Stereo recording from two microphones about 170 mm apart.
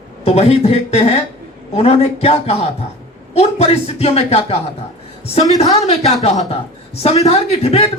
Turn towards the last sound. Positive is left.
turn(degrees=35)  # may be behind; listen again after turning